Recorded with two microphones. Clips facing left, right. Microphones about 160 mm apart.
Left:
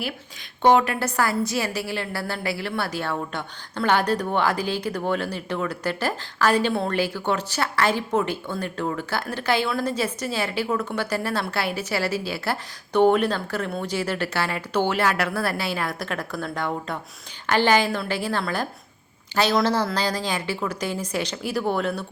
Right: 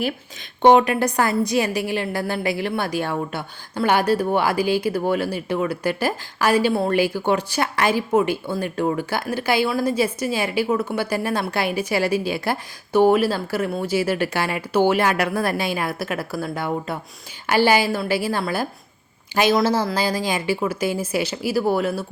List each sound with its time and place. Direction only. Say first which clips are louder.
0.6 s a woman's voice: right 4 dB; 20° right (ahead or behind)